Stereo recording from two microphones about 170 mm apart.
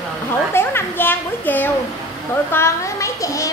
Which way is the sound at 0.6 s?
15° left (ahead or behind).